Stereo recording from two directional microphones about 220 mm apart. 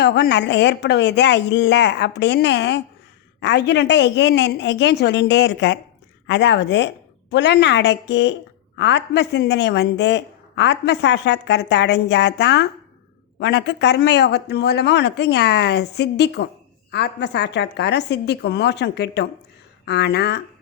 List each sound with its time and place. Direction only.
0.0 s speech: 50° left (ahead or behind)